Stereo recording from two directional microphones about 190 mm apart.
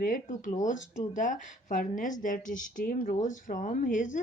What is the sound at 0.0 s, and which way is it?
Speech, 45° left (ahead or behind).